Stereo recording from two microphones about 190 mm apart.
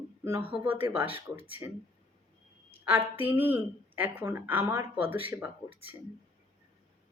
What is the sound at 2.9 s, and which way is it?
Speech, 10° right (ahead or behind).